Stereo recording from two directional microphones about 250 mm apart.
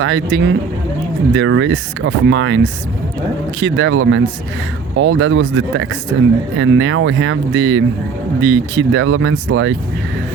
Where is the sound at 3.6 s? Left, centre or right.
Right.